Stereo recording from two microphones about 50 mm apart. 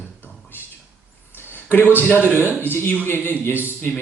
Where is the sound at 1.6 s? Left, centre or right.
Left.